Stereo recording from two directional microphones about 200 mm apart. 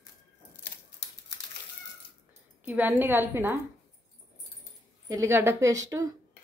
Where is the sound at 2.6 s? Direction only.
10° right (ahead or behind).